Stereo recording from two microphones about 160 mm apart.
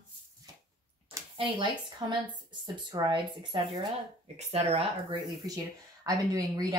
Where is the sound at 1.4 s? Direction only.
30° right (ahead or behind).